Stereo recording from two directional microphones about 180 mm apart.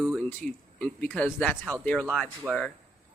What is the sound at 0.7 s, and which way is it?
Speech, 5° left (ahead or behind).